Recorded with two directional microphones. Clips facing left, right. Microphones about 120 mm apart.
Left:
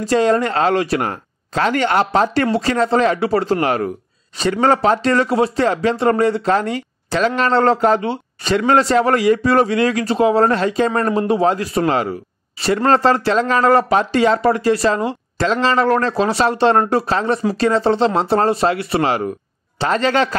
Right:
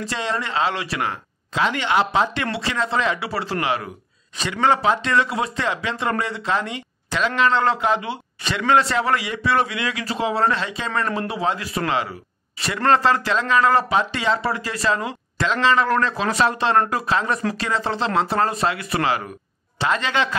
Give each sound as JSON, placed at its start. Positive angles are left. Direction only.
{"t": 0.0, "sound": "speech", "side_deg": 45}